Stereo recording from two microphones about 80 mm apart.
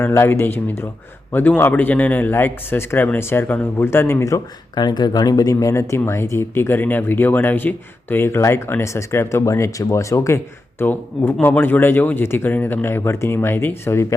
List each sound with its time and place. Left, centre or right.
0.0 s speech: left
4.7 s speech: left